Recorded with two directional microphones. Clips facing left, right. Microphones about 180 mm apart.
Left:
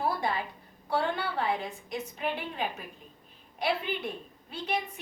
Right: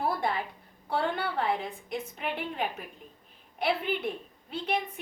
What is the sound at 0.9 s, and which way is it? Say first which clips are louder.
Speech: even; 55° right (ahead or behind).